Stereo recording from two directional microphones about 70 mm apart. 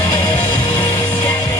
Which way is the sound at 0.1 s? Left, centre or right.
Left.